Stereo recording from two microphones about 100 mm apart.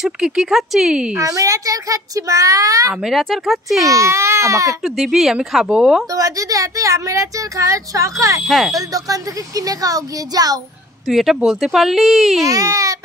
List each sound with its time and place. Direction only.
0.0 s speech: 5° right (ahead or behind)
1.1 s speech: 35° right (ahead or behind)
2.9 s speech: 5° right (ahead or behind)
3.9 s speech: 30° right (ahead or behind)
4.8 s speech: 5° right (ahead or behind)
6.1 s speech: 35° right (ahead or behind)
8.5 s speech: centre (ahead or behind)
8.7 s speech: 35° right (ahead or behind)
11.1 s speech: 5° right (ahead or behind)
12.4 s speech: 35° right (ahead or behind)